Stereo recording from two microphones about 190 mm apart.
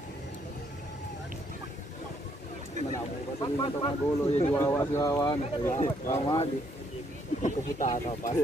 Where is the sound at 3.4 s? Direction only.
25° left (ahead or behind).